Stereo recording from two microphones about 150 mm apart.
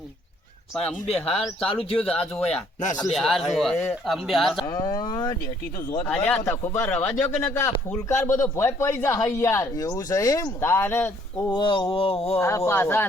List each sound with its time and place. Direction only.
0.7 s speech: 5° left (ahead or behind)
1.7 s a sound: 40° left (ahead or behind)
3.1 s speech: centre (ahead or behind)
4.6 s speech: 25° left (ahead or behind)
6.1 s speech: 10° left (ahead or behind)
11.5 s a sound: 35° left (ahead or behind)
12.4 s speech: 20° left (ahead or behind)